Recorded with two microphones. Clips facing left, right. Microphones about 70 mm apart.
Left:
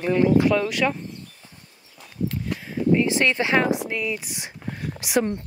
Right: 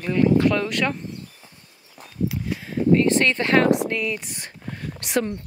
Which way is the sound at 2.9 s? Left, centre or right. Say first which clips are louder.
Right 2 dB; centre.